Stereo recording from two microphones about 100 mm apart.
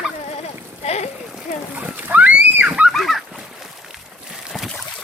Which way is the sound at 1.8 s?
15° right (ahead or behind).